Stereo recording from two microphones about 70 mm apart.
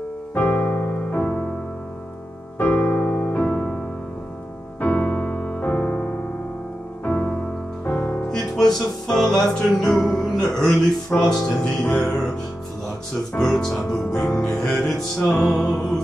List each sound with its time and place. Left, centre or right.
0.3 s music: left
2.6 s music: left
3.4 s music: centre
4.7 s music: left
8.3 s music: centre
11.1 s speech: centre
11.8 s music: centre
13.3 s music: centre